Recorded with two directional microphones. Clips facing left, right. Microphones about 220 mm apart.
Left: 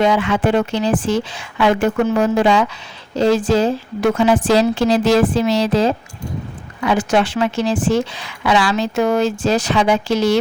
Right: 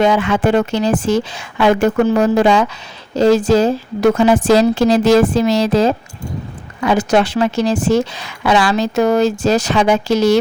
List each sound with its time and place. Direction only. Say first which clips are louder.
0.0 s a woman's voice: right 2 dB; 45° right (ahead or behind)